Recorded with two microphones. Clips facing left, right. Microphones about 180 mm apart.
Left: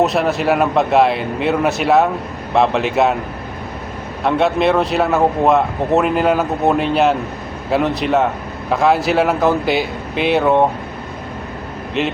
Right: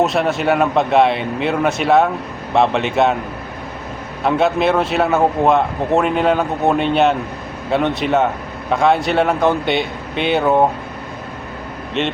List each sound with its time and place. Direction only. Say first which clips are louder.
0.0 s speech: left 1 dB; centre (ahead or behind)
4.2 s speech: even; centre (ahead or behind)
12.0 s speech: left 1 dB; centre (ahead or behind)